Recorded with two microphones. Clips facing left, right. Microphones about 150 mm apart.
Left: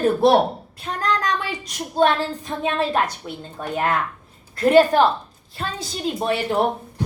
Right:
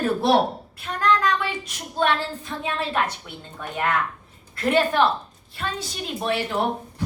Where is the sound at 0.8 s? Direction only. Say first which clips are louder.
Right 2 dB; 35° left (ahead or behind).